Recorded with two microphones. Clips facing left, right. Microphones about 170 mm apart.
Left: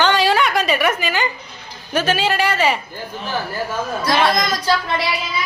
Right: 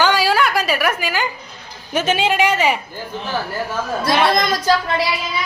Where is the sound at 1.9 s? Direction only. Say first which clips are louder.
Right 1 dB; 20° right (ahead or behind).